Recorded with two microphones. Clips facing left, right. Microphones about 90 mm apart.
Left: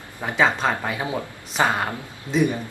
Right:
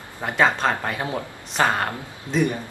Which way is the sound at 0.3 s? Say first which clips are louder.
Even; centre (ahead or behind).